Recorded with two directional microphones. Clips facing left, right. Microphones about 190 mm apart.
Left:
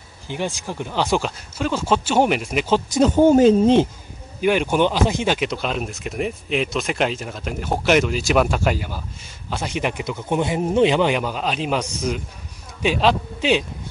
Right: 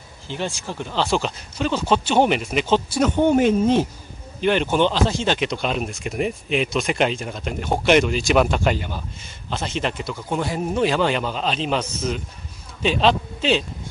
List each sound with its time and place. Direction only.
0.3 s speech: 15° left (ahead or behind)
3.0 s speech: 35° left (ahead or behind)
4.4 s speech: 10° left (ahead or behind)